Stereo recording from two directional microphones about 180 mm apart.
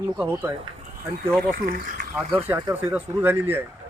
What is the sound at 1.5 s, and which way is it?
Speech, 55° right (ahead or behind).